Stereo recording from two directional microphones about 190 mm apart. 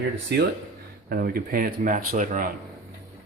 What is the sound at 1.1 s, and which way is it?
Speech, 50° right (ahead or behind).